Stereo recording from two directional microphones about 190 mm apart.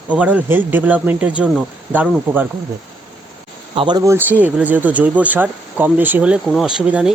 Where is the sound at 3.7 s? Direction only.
25° right (ahead or behind); by 7.1 s 5° right (ahead or behind).